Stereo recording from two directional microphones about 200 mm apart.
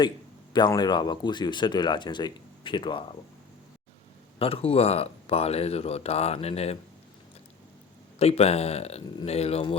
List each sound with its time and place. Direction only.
0.5 s speech: 20° left (ahead or behind)
4.4 s speech: 30° left (ahead or behind)
8.2 s speech: 30° left (ahead or behind)